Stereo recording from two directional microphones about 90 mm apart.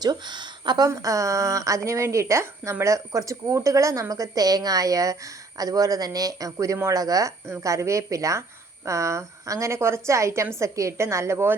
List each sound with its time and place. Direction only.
0.0 s speech: 55° right (ahead or behind)
0.9 s a woman's voice: 35° right (ahead or behind)